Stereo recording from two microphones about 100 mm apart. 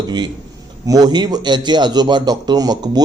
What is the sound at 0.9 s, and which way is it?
A man's voice, 40° right (ahead or behind).